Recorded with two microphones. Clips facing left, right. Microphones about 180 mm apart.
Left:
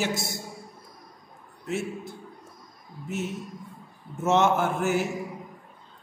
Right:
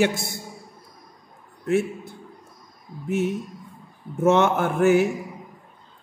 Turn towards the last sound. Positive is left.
turn(degrees=-55)  # may be behind; listen again after turning